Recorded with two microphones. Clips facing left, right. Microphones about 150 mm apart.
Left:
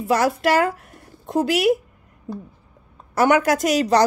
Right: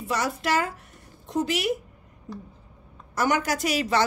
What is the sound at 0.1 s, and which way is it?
Speech, 60° left (ahead or behind).